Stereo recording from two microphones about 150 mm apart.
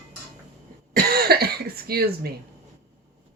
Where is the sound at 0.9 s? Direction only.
90° right.